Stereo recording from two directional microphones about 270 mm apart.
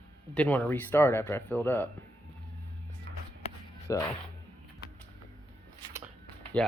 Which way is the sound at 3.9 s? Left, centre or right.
Centre.